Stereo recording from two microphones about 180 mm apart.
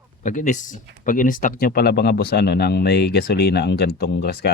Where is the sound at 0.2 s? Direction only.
45° left (ahead or behind).